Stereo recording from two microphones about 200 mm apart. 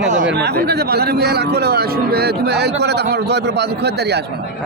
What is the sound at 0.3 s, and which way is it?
A man's voice, 55° right (ahead or behind).